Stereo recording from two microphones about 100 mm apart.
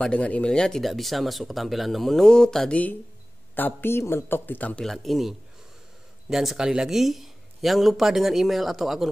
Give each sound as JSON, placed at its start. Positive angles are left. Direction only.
{"t": 0.0, "sound": "speech", "side_deg": 10}
{"t": 3.5, "sound": "a man's voice", "side_deg": 20}
{"t": 4.8, "sound": "speech", "side_deg": 0}
{"t": 6.3, "sound": "speech", "side_deg": -5}